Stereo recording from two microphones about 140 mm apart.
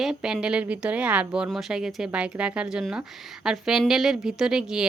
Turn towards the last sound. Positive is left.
turn(degrees=-5)  # may be behind; listen again after turning